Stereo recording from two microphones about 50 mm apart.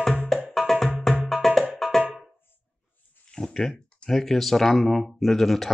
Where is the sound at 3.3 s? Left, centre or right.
Centre.